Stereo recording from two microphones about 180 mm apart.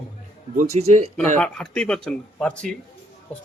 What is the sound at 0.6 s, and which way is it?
Speech, 40° right (ahead or behind).